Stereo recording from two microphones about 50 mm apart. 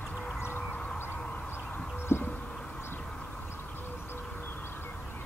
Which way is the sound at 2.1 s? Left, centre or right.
Left.